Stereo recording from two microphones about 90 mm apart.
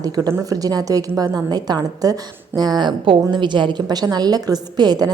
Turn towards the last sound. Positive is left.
turn(degrees=-50)  # may be behind; listen again after turning